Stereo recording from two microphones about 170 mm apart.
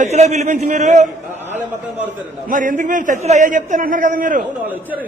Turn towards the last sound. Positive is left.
turn(degrees=-50)  # may be behind; listen again after turning